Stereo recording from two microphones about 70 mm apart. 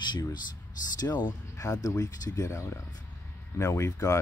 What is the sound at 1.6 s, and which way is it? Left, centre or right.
Speech, left.